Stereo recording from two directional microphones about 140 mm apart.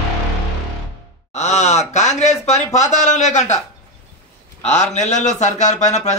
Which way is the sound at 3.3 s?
55° left (ahead or behind).